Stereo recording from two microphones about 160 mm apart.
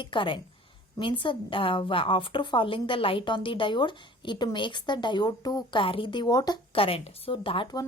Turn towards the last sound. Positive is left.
turn(degrees=30)  # may be behind; listen again after turning